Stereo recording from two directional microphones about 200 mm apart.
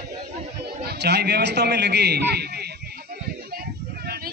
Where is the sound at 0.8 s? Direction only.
55° right (ahead or behind).